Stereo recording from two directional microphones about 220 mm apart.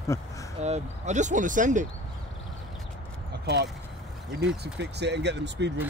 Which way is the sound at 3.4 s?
45° right (ahead or behind).